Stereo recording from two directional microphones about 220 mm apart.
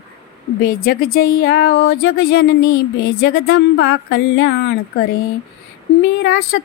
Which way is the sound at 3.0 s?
45° left (ahead or behind).